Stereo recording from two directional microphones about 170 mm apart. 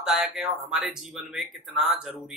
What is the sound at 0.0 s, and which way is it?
Speech, centre (ahead or behind).